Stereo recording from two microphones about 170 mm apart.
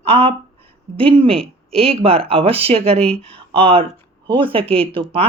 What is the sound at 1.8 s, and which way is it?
Speech, 35° right (ahead or behind).